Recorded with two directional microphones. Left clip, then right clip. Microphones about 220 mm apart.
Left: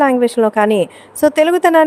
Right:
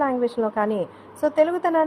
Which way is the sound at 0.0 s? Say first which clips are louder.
Left 10 dB; 65° left (ahead or behind).